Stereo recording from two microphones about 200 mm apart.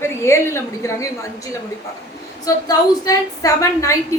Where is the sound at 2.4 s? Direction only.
20° left (ahead or behind).